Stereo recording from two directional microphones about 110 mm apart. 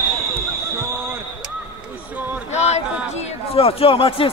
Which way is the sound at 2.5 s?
90° left.